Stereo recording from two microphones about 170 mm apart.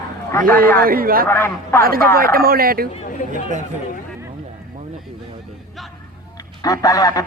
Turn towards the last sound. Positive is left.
turn(degrees=20)  # may be behind; listen again after turning